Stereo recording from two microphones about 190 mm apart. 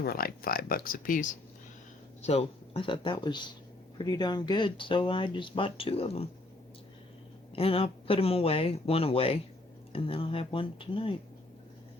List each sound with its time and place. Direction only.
0.0 s speech: 50° left (ahead or behind)
2.2 s speech: 35° left (ahead or behind)
7.5 s speech: 30° left (ahead or behind)